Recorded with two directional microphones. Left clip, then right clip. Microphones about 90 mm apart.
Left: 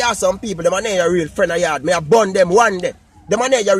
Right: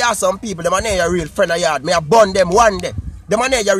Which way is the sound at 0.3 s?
10° right (ahead or behind).